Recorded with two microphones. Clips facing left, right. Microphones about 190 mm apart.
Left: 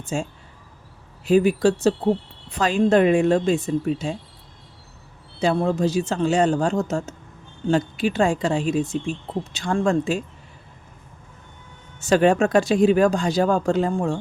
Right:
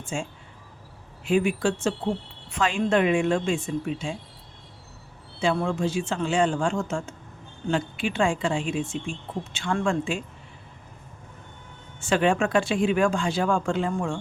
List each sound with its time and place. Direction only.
0.0 s speech: 40° left (ahead or behind)
5.4 s speech: 40° left (ahead or behind)
11.9 s speech: 40° left (ahead or behind)